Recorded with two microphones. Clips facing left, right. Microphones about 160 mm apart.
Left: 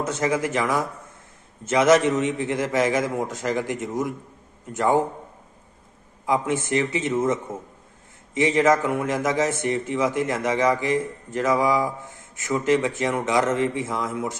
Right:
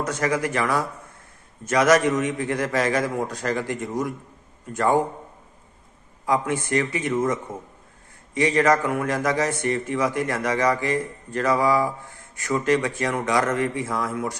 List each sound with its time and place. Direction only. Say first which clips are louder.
0.0 s a man's voice: even; 20° left (ahead or behind)
6.2 s a man's voice: even; 20° left (ahead or behind)